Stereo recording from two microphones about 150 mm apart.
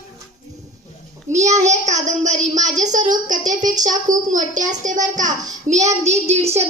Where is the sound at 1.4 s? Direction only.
50° right (ahead or behind).